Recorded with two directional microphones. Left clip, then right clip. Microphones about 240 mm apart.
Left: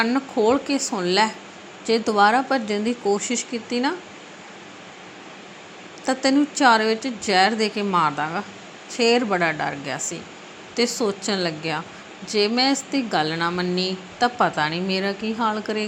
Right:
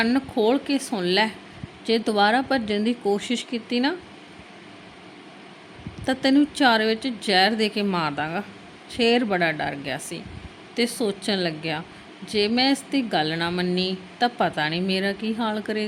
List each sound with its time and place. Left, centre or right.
0.0 s a woman's voice: centre
6.1 s a woman's voice: centre
11.3 s a woman's voice: centre